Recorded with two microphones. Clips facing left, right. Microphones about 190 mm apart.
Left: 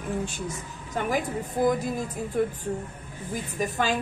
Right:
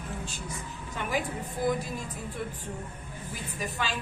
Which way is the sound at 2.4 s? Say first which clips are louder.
Left 12 dB; 50° left (ahead or behind).